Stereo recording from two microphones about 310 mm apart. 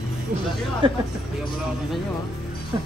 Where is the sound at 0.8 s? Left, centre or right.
Centre.